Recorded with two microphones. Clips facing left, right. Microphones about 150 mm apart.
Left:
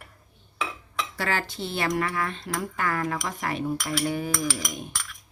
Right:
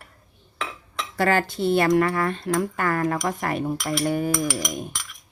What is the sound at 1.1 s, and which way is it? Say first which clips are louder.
Speech: right 9 dB; 50° right (ahead or behind).